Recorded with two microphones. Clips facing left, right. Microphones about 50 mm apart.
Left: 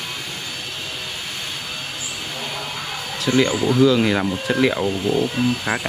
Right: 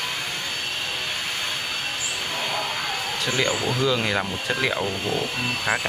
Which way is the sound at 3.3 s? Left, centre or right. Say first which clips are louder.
Left 7 dB; centre.